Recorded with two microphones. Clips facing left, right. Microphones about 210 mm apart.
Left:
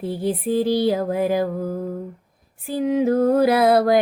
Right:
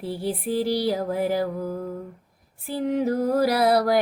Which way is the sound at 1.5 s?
45° left (ahead or behind).